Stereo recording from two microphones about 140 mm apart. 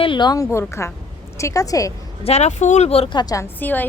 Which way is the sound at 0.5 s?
20° left (ahead or behind).